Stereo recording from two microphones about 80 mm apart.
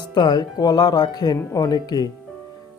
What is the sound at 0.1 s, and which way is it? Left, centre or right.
Speech, left.